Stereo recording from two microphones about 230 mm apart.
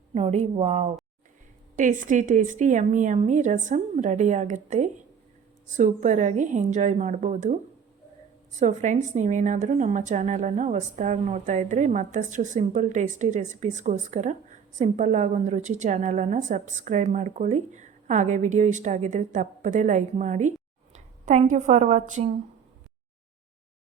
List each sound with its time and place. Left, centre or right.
0.1 s a woman's voice: right
8.5 s a woman's voice: right